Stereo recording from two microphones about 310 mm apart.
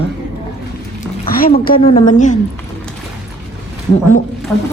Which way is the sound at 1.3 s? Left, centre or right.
Left.